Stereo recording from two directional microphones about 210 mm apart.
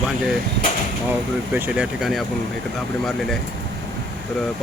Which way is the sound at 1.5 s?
5° right (ahead or behind).